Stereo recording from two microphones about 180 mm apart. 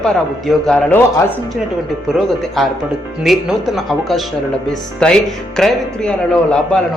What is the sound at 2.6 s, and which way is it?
A man's voice, centre (ahead or behind).